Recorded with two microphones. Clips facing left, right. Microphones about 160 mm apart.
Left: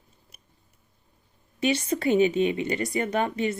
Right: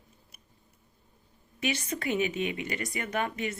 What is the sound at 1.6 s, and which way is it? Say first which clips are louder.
Speech: left 7 dB; 30° left (ahead or behind).